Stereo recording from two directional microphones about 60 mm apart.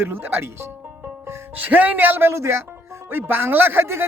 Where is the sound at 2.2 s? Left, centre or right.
Right.